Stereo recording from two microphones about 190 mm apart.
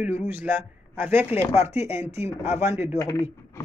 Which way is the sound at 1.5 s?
30° left (ahead or behind).